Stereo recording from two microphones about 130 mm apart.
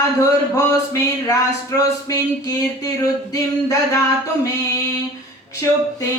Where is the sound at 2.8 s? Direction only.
25° left (ahead or behind).